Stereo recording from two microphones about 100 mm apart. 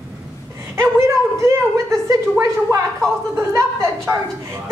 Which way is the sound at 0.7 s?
30° right (ahead or behind).